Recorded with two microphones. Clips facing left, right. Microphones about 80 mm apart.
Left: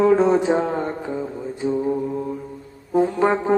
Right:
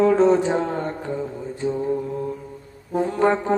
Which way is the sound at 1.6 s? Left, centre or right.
Centre.